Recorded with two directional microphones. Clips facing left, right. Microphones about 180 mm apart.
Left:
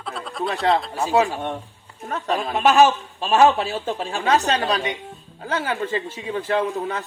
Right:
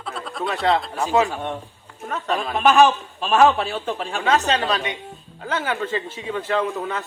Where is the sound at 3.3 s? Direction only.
30° left (ahead or behind).